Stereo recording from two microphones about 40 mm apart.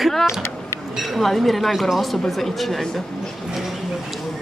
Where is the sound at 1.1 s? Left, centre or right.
Centre.